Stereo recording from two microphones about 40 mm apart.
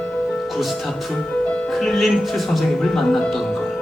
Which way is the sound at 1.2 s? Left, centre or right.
Left.